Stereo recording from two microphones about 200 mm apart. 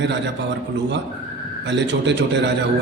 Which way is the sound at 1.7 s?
60° right (ahead or behind).